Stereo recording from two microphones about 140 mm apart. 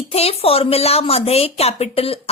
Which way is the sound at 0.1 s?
45° left (ahead or behind).